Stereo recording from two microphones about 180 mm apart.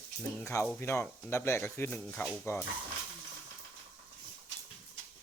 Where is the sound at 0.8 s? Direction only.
15° left (ahead or behind).